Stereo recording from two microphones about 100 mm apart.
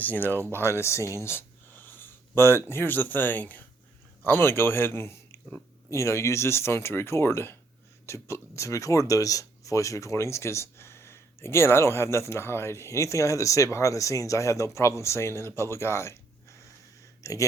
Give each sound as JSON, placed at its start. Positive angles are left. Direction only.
{"t": 0.0, "sound": "speech", "side_deg": 20}